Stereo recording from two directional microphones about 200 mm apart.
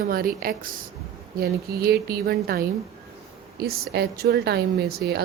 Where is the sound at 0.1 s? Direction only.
45° right (ahead or behind).